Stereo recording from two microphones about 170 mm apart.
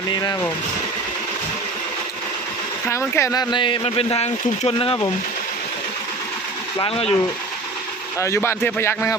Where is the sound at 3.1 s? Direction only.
15° left (ahead or behind); by 5.0 s 35° left (ahead or behind).